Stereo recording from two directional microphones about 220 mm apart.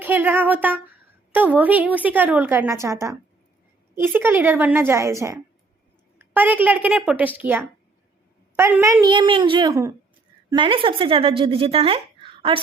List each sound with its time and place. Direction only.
0.0 s a woman's voice: 10° right (ahead or behind); by 12.5 s 25° right (ahead or behind)